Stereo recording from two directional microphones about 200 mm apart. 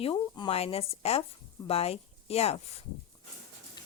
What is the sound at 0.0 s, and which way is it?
Speech, 25° left (ahead or behind).